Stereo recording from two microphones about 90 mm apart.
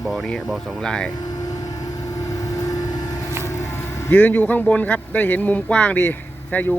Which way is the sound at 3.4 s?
30° left (ahead or behind).